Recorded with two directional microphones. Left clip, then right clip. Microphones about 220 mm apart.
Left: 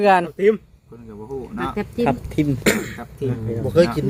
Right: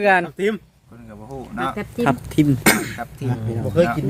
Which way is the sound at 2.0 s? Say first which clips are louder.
Right 2 dB; 40° right (ahead or behind).